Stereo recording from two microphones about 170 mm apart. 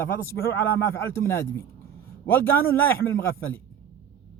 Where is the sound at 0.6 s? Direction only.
15° left (ahead or behind).